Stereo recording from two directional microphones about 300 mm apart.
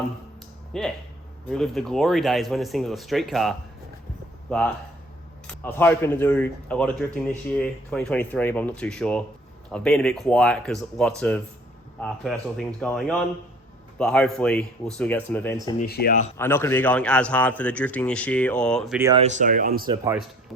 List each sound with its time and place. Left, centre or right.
0.7 s a man's voice: centre
15.8 s speech: left
16.4 s a man's voice: centre
19.2 s speech: right